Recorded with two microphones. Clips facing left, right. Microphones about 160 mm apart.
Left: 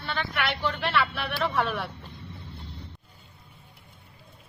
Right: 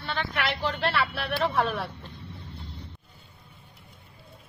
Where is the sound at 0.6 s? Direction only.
35° right (ahead or behind).